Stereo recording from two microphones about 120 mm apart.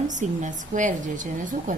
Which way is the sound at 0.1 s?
90° right.